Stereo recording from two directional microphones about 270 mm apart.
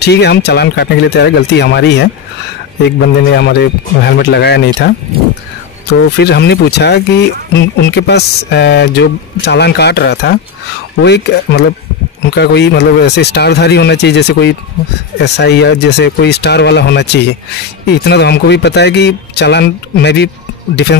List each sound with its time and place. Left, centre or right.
0.0 s speech: left
5.9 s speech: left